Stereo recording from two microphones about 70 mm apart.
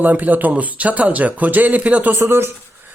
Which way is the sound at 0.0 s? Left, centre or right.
Right.